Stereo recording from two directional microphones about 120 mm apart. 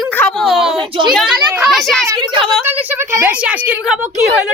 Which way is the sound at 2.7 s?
20° right (ahead or behind).